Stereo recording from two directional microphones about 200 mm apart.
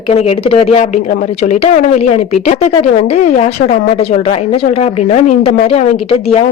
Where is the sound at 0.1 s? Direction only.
30° left (ahead or behind).